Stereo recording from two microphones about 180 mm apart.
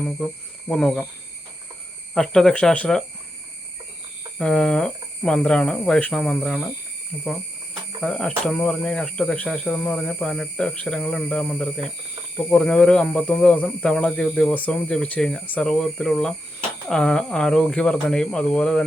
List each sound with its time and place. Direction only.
0.7 s speech: 5° left (ahead or behind)
2.1 s speech: centre (ahead or behind)
4.4 s speech: 5° left (ahead or behind)
8.0 s speech: 5° left (ahead or behind)